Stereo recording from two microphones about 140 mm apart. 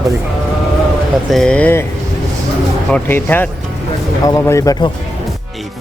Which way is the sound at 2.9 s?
15° left (ahead or behind).